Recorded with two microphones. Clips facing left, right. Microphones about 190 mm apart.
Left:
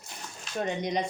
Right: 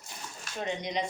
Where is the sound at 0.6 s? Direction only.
50° left (ahead or behind).